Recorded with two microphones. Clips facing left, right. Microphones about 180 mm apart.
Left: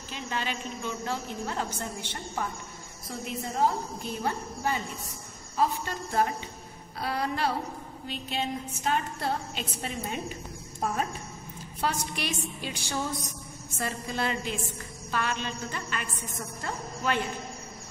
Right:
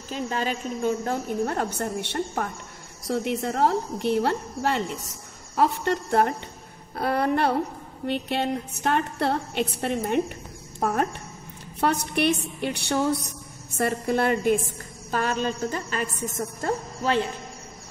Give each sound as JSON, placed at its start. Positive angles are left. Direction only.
{"t": 0.1, "sound": "a woman's voice", "side_deg": -40}
{"t": 3.1, "sound": "a woman's voice", "side_deg": -70}
{"t": 15.0, "sound": "a woman's voice", "side_deg": -40}